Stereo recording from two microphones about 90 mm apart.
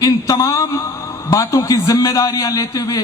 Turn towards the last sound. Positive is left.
turn(degrees=40)  # may be behind; listen again after turning